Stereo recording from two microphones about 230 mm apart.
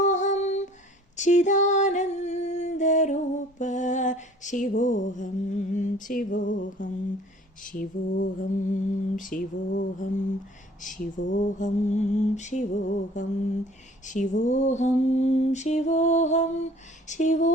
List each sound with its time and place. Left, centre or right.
0.0 s humming: left
1.1 s a sound: left
7.6 s lullaby: left
10.8 s speech: left
11.3 s lullaby: left